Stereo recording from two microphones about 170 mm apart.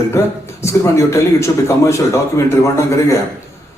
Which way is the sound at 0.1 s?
15° left (ahead or behind).